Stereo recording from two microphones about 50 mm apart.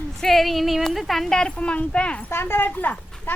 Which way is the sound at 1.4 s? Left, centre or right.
Left.